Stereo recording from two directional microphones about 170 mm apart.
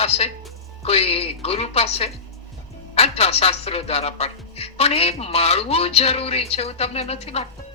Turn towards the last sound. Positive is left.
turn(degrees=35)  # may be behind; listen again after turning